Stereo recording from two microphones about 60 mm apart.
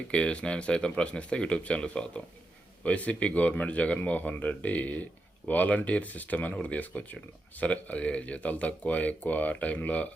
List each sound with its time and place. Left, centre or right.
0.1 s speech: centre